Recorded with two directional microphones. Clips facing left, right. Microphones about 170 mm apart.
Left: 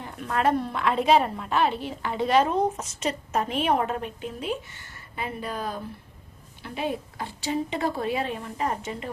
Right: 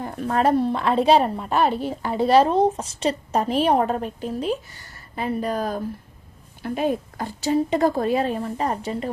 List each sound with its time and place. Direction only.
0.0 s a woman's voice: 35° right (ahead or behind)